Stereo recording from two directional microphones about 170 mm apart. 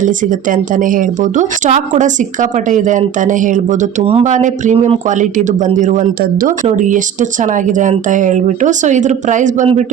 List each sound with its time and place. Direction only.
0.0 s speech: 50° right (ahead or behind)